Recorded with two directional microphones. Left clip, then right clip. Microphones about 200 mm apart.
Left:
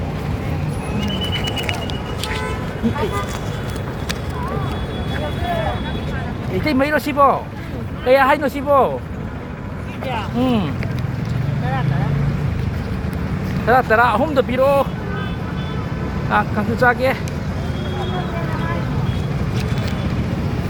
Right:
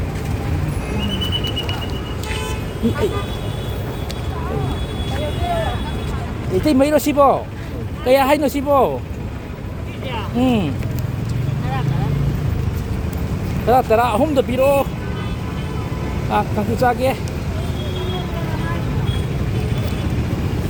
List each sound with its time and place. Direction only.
6.7 s speech: 40° right (ahead or behind)
10.1 s speech: 35° right (ahead or behind)
13.7 s speech: 35° right (ahead or behind)
16.3 s speech: 35° right (ahead or behind)